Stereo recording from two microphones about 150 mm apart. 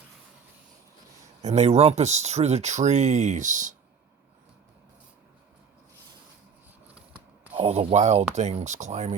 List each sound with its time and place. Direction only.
1.4 s speech: 50° right (ahead or behind)
6.9 s scissors: 10° right (ahead or behind)
7.5 s speech: 45° right (ahead or behind)